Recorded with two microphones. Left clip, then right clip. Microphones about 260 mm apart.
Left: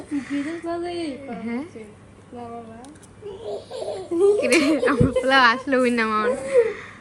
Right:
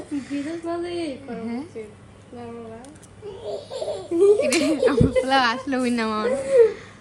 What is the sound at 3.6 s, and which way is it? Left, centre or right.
Laughter, centre.